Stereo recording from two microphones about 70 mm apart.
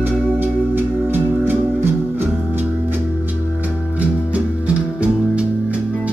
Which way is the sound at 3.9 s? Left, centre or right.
Centre.